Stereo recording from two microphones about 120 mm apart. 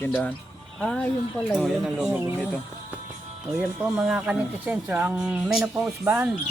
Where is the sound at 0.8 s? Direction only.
5° left (ahead or behind).